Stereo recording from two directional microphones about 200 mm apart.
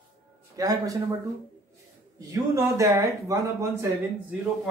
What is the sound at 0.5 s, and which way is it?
Speech, 15° right (ahead or behind).